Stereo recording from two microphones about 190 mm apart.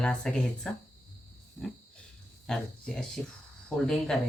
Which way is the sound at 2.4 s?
5° left (ahead or behind).